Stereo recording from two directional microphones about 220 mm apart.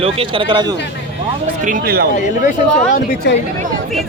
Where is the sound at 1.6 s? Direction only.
40° right (ahead or behind).